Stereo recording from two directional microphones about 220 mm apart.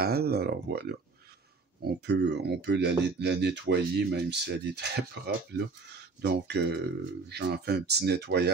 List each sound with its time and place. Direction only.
0.0 s speech: 45° right (ahead or behind)